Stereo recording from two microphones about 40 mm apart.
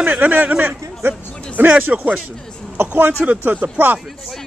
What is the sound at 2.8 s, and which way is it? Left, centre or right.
Speech, right.